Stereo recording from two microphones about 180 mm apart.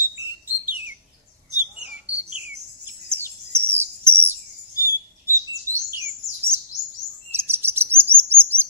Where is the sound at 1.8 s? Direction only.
5° right (ahead or behind).